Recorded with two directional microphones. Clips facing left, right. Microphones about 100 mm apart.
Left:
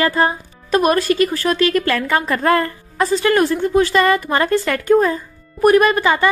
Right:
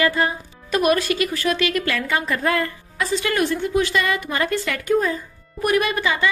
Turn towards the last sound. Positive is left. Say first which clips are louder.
# left 7 dB
turn(degrees=45)  # may be behind; listen again after turning